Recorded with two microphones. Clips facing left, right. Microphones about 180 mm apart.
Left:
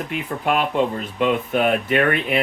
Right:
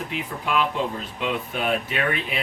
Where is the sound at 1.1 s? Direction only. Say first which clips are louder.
Left 10 dB; 55° left (ahead or behind).